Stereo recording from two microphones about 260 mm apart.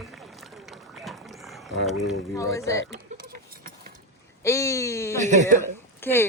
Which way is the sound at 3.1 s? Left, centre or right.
Right.